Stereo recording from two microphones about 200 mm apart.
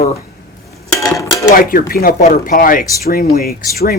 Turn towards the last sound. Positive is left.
turn(degrees=50)  # may be behind; listen again after turning